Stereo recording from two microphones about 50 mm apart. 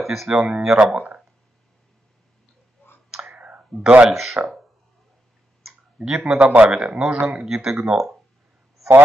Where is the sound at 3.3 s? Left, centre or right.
Right.